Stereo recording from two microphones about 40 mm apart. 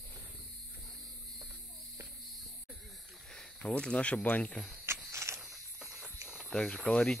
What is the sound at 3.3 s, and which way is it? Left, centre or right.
Speech, left.